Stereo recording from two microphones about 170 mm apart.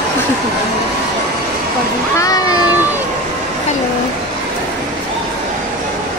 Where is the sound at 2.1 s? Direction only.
20° left (ahead or behind).